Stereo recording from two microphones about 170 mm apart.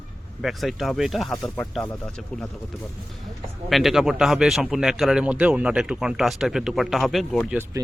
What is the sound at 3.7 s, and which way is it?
Speech, centre (ahead or behind).